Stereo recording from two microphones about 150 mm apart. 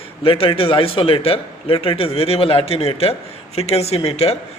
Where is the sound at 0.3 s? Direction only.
40° left (ahead or behind).